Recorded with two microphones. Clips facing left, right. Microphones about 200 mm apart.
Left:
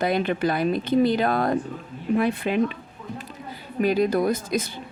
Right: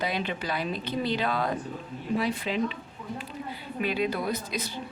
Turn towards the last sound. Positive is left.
turn(degrees=45)  # may be behind; listen again after turning